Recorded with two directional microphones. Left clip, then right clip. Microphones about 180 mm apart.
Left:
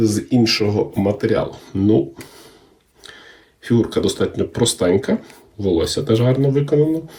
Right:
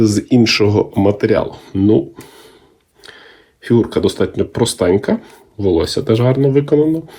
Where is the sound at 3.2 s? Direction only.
35° right (ahead or behind).